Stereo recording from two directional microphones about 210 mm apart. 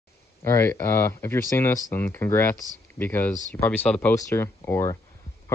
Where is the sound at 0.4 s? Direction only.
10° left (ahead or behind).